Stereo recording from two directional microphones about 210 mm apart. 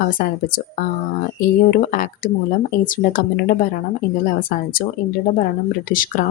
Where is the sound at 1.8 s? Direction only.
40° left (ahead or behind).